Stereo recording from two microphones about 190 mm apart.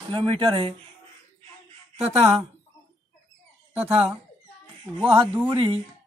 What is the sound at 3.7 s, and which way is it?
Speech, 10° right (ahead or behind).